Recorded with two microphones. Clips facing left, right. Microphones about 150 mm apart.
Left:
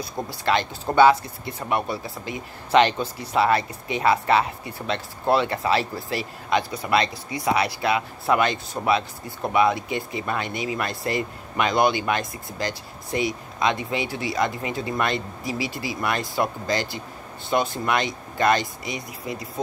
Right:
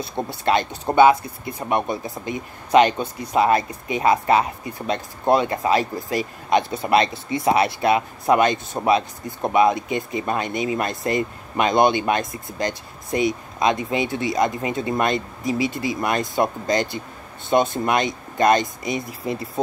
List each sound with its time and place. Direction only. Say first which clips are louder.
0.0 s speech: right 3 dB; 25° right (ahead or behind)